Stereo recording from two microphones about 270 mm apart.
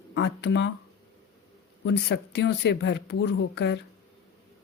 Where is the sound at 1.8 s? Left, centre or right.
Left.